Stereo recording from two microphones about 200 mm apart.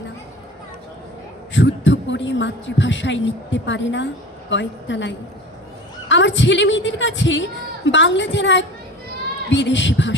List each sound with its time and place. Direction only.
1.5 s a man's voice: 65° left (ahead or behind)